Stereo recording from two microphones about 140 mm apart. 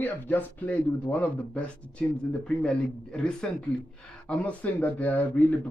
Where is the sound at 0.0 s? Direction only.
15° left (ahead or behind).